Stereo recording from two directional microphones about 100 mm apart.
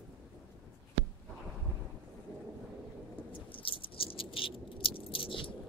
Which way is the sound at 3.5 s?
60° left (ahead or behind).